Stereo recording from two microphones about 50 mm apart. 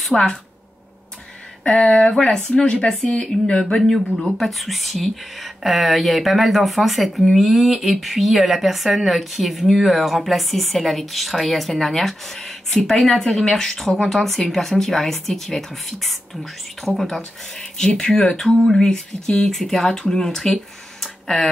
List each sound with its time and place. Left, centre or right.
0.0 s a woman's voice: centre
1.8 s speech: centre
21.0 s a sound: centre